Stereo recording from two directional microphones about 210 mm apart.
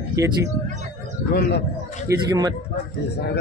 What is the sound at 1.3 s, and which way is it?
Speech, 50° left (ahead or behind).